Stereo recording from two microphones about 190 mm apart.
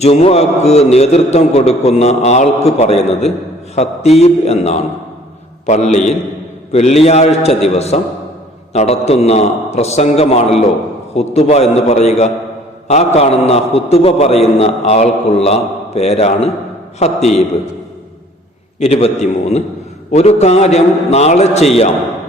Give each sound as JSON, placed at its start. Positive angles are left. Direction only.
{"t": 0.0, "sound": "a man's voice", "side_deg": 35}
{"t": 18.8, "sound": "a man's voice", "side_deg": 35}